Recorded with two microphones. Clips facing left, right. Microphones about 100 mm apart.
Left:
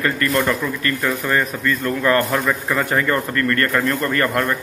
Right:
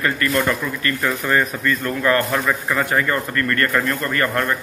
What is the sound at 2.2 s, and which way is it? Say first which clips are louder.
Speech: left 1 dB; centre (ahead or behind).